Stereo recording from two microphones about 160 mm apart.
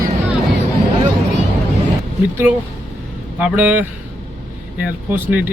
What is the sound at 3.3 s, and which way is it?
Speech, 10° right (ahead or behind).